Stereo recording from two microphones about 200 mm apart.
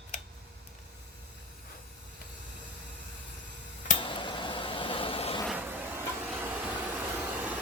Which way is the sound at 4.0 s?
25° left (ahead or behind).